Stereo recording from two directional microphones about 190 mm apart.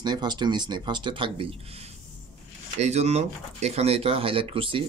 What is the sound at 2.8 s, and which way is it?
Speech, 35° right (ahead or behind).